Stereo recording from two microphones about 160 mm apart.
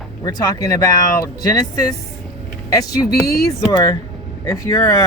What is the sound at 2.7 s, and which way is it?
Speech, 20° left (ahead or behind).